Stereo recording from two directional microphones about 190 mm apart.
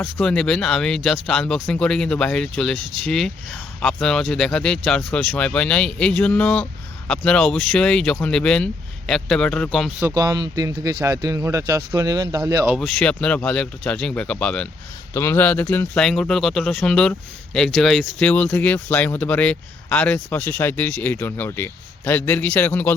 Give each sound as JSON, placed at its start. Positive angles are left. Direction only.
{"t": 0.0, "sound": "speech", "side_deg": 5}
{"t": 10.0, "sound": "speech", "side_deg": -20}
{"t": 12.8, "sound": "speech", "side_deg": 5}